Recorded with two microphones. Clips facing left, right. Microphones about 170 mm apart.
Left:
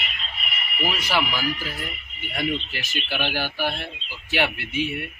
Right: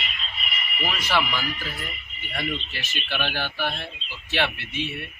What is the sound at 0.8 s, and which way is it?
Speech, 10° left (ahead or behind).